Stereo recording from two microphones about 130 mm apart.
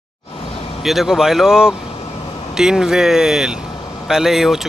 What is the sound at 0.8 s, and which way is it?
Speech, centre (ahead or behind).